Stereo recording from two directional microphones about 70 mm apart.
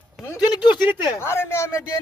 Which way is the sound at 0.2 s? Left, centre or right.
Centre.